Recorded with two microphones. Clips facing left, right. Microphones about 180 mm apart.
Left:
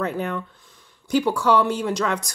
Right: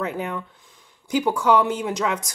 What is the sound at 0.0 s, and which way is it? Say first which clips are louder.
Speech: left 2 dB; 10° right (ahead or behind).